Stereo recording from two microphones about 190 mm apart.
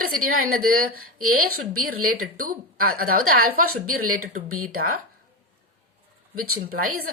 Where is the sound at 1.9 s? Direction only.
50° right (ahead or behind).